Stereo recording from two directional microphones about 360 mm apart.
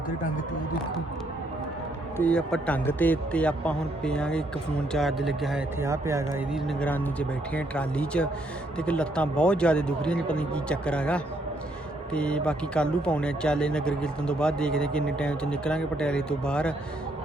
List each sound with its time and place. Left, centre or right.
2.1 s speech: centre